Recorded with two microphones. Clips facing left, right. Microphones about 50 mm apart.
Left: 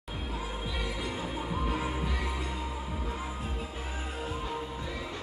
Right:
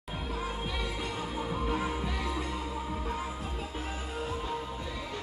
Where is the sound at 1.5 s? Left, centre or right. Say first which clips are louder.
Right 1 dB; centre.